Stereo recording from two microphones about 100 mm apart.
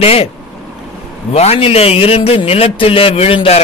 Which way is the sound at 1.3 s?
85° left.